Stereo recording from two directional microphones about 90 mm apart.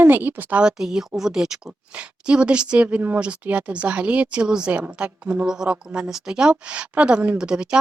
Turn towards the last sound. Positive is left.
turn(degrees=-10)  # may be behind; listen again after turning